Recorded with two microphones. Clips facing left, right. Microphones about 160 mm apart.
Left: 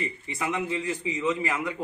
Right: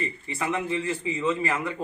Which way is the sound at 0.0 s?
20° left (ahead or behind).